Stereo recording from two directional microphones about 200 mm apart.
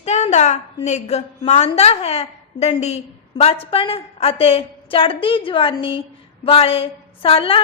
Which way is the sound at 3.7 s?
30° left (ahead or behind).